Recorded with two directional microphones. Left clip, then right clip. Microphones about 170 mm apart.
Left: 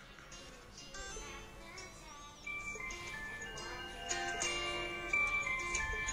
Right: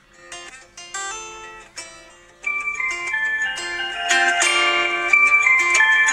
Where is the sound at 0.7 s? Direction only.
45° right (ahead or behind).